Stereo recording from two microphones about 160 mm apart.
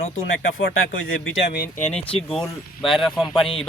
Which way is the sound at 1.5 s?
70° left (ahead or behind).